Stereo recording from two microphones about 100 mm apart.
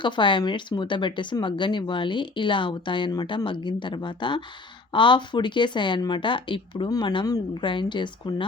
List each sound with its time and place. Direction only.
0.0 s speech: 55° left (ahead or behind)